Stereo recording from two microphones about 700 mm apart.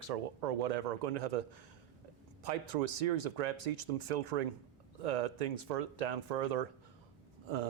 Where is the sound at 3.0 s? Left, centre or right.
Right.